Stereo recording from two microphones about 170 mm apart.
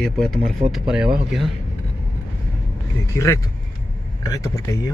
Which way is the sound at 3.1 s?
15° left (ahead or behind).